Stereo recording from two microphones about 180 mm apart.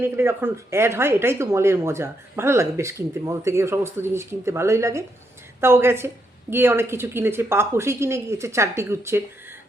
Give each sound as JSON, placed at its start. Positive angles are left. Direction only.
{"t": 0.0, "sound": "speech", "side_deg": -15}